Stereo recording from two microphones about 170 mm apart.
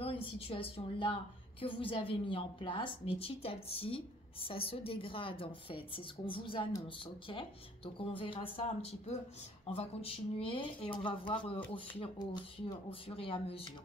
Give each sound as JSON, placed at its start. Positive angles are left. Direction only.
{"t": 0.0, "sound": "a woman's voice", "side_deg": 35}